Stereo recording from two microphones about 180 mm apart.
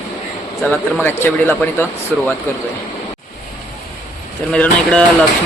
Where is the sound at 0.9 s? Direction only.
10° left (ahead or behind).